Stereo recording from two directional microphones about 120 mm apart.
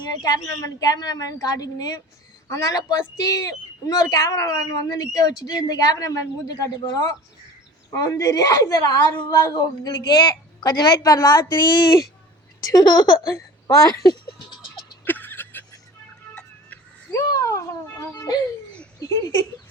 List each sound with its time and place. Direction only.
0.0 s a woman's voice: 35° left (ahead or behind)
11.5 s a woman's voice: 40° left (ahead or behind)
15.0 s a sound: 15° left (ahead or behind)
16.3 s music: 10° left (ahead or behind)
17.1 s a sound: 25° left (ahead or behind)
18.9 s speech: 30° left (ahead or behind)